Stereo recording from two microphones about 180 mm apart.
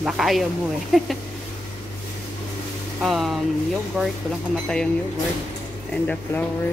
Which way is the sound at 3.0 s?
Centre (ahead or behind).